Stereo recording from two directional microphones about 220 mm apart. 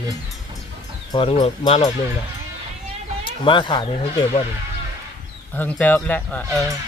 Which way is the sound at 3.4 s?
20° left (ahead or behind).